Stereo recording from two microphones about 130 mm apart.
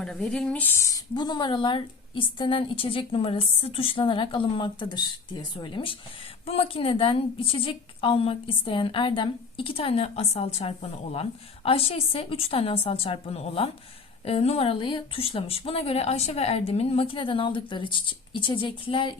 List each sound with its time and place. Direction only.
0.0 s a woman's voice: 5° left (ahead or behind); by 19.1 s 40° left (ahead or behind)